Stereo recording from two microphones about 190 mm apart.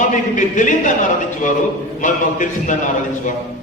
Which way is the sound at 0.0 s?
40° left (ahead or behind).